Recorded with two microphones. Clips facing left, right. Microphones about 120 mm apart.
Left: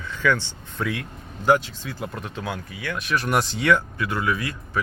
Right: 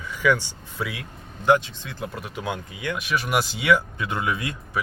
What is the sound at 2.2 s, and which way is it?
Speech, 20° right (ahead or behind).